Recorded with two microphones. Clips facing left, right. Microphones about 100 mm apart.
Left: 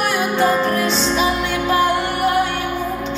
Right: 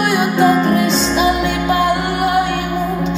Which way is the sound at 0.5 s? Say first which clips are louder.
Right 4 dB; 15° right (ahead or behind).